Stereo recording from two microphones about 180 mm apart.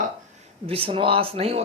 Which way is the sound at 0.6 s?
30° right (ahead or behind).